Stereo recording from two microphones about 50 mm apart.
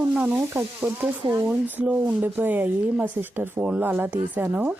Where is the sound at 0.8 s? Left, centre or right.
Right.